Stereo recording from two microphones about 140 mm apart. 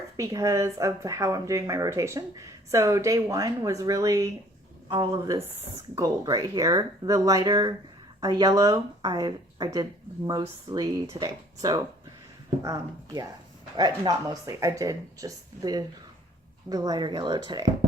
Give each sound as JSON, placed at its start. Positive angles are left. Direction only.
{"t": 0.2, "sound": "speech", "side_deg": -25}